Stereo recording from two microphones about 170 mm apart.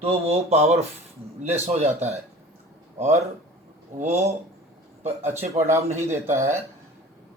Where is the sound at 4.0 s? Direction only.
40° right (ahead or behind).